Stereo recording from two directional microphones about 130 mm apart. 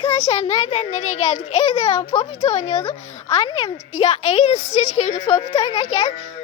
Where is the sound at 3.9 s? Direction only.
55° left (ahead or behind).